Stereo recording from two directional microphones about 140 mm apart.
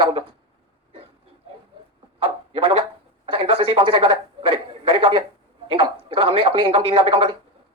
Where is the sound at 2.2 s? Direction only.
40° right (ahead or behind).